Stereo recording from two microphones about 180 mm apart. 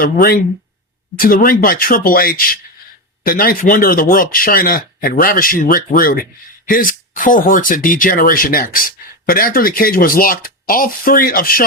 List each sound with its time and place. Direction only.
0.0 s speech: 55° left (ahead or behind)